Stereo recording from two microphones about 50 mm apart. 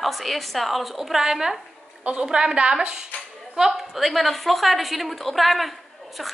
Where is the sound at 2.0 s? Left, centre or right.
Right.